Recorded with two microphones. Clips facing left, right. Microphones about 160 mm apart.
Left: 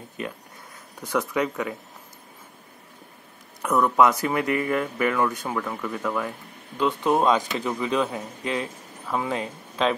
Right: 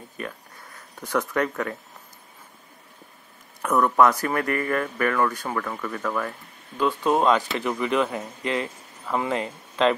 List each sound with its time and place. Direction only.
1.0 s speech: 10° left (ahead or behind)
3.6 s speech: 10° left (ahead or behind)